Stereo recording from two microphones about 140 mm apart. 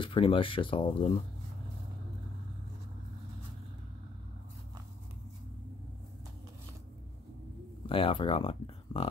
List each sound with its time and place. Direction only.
0.0 s speech: 40° left (ahead or behind)
7.8 s speech: 40° left (ahead or behind)